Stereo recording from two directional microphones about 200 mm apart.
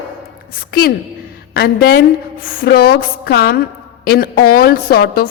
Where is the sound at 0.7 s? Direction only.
50° left (ahead or behind).